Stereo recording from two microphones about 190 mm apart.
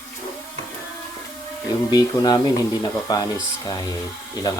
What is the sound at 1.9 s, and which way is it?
Speech, 20° left (ahead or behind).